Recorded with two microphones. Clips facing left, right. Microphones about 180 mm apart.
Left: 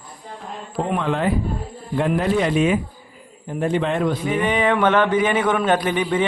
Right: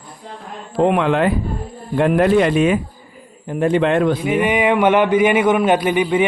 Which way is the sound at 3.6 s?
75° right (ahead or behind).